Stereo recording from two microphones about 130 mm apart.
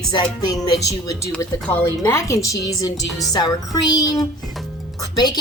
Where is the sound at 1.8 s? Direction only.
20° left (ahead or behind).